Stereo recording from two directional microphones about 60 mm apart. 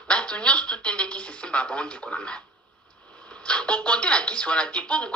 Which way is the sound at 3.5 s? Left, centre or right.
Centre.